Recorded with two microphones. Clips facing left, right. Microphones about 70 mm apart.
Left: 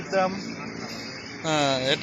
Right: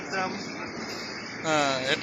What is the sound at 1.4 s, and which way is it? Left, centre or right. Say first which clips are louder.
Speech: left 2 dB; centre.